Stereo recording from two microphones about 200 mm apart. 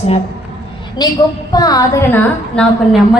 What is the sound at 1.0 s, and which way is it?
A woman's voice, 20° left (ahead or behind).